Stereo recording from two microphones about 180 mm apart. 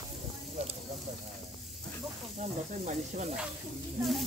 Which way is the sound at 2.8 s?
40° right (ahead or behind).